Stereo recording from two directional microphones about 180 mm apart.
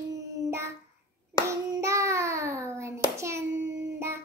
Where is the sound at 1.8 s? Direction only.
15° right (ahead or behind).